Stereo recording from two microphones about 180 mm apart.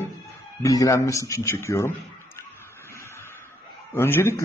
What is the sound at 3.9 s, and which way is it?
Speech, 10° left (ahead or behind).